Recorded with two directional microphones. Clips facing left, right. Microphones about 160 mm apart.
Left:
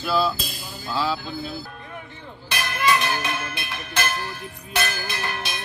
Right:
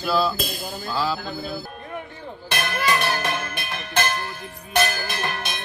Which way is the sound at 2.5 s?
45° right (ahead or behind).